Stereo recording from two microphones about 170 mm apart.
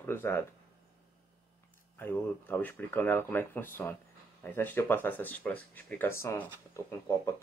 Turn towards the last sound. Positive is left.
turn(degrees=15)  # may be behind; listen again after turning